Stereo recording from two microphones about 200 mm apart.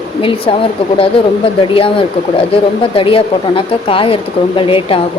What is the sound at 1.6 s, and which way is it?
A woman's voice, 25° left (ahead or behind).